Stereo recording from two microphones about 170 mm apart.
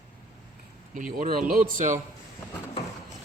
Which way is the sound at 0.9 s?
50° right (ahead or behind).